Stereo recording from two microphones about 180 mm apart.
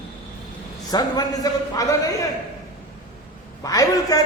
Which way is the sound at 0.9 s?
20° left (ahead or behind).